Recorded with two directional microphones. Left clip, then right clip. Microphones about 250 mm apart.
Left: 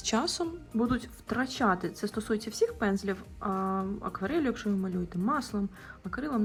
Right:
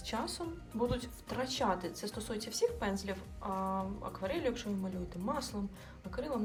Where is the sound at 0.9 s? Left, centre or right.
Centre.